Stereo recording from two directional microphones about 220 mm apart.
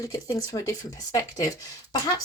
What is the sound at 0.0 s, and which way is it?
Speech, 15° left (ahead or behind).